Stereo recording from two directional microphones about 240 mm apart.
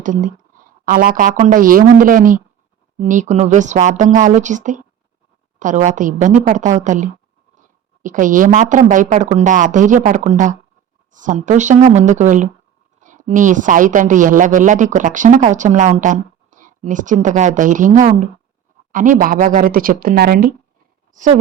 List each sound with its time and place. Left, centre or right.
0.0 s a woman's voice: right